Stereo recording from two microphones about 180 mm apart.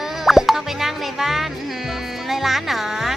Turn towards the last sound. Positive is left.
turn(degrees=0)  # may be behind; listen again after turning